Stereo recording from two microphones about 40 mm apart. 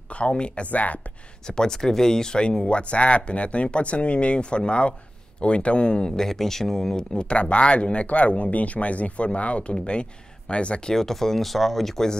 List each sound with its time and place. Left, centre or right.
0.1 s speech: left
0.7 s speech: left
1.5 s speech: centre
2.6 s speech: left
6.1 s speech: centre
7.2 s speech: left
10.9 s speech: centre